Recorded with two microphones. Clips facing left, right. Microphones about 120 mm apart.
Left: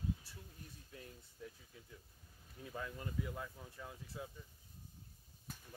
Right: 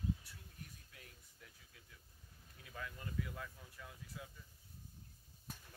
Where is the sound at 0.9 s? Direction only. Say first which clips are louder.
Left 8 dB; 30° left (ahead or behind).